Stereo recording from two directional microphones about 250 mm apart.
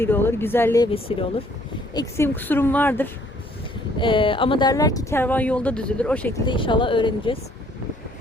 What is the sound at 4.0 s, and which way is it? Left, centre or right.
A woman's voice, centre.